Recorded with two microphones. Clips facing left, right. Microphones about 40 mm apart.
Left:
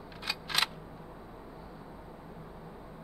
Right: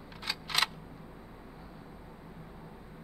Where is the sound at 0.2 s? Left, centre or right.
Centre.